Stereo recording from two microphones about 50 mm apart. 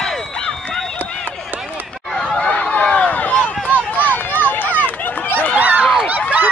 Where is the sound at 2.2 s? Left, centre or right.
Left.